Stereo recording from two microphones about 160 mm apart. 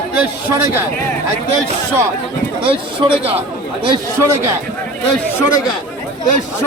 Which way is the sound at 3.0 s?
25° right (ahead or behind).